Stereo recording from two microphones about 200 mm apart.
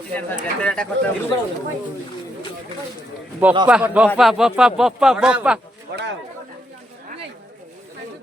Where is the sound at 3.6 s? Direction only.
5° right (ahead or behind).